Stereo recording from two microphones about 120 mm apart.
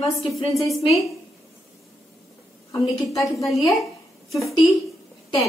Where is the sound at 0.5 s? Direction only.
Centre (ahead or behind).